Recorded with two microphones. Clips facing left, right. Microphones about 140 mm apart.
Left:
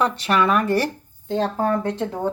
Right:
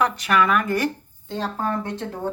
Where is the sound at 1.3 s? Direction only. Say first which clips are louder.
Left 5 dB; 50° left (ahead or behind).